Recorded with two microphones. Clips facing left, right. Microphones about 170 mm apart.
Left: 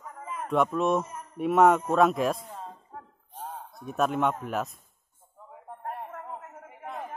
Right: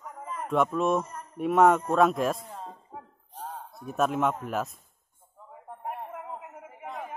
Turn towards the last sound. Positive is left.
turn(degrees=0)  # may be behind; listen again after turning